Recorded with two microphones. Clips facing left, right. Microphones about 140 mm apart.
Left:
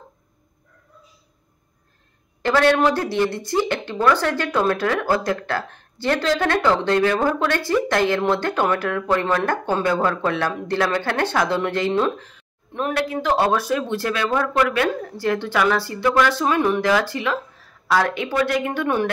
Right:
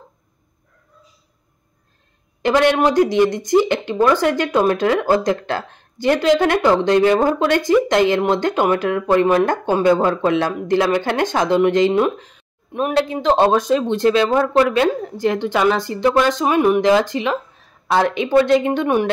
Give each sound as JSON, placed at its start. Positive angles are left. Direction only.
{"t": 2.4, "sound": "speech", "side_deg": -20}